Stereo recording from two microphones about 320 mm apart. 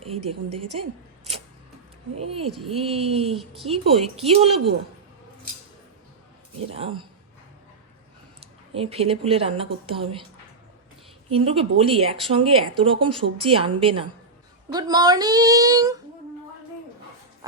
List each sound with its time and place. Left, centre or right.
0.0 s a woman's voice: centre
0.5 s a woman's voice: right
2.6 s speech: centre
3.3 s speech: centre
3.7 s speech: centre
6.7 s speech: centre
8.4 s speech: centre
11.3 s speech: centre